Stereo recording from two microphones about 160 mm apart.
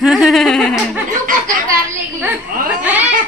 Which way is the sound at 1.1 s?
55° right (ahead or behind).